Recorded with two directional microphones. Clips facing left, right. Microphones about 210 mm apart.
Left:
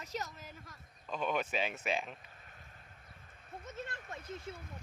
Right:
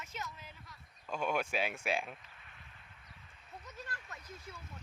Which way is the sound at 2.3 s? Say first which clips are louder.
Left 2 dB; 40° left (ahead or behind).